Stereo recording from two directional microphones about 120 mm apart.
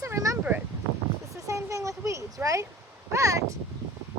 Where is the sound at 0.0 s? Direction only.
25° right (ahead or behind).